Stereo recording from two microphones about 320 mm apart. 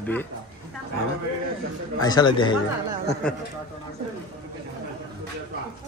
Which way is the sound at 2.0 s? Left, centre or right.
Centre.